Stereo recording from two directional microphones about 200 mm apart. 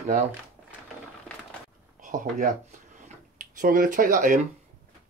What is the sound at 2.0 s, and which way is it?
Speech, 40° right (ahead or behind).